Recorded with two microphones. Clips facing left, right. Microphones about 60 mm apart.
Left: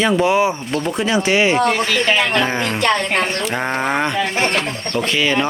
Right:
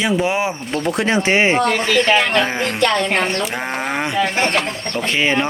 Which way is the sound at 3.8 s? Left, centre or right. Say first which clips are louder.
Left 3 dB; centre.